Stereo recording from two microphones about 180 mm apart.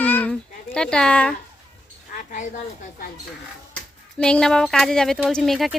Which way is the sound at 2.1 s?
50° left (ahead or behind).